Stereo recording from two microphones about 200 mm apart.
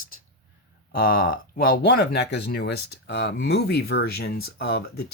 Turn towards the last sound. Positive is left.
turn(degrees=50)  # may be behind; listen again after turning